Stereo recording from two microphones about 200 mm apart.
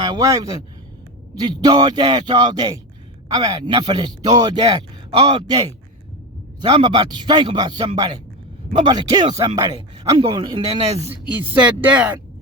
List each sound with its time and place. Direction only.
0.0 s speech: 20° right (ahead or behind)
6.6 s speech: 20° right (ahead or behind)
11.1 s speech: 10° right (ahead or behind)